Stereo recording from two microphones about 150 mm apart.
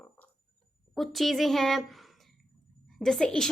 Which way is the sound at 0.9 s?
Centre (ahead or behind).